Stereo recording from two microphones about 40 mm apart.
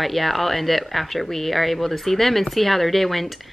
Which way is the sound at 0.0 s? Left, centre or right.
Centre.